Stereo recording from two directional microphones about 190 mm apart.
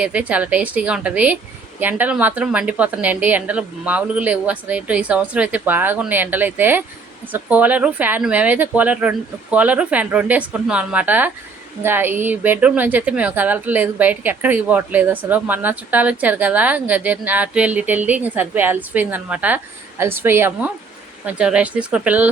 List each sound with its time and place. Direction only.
0.0 s speech: 5° right (ahead or behind)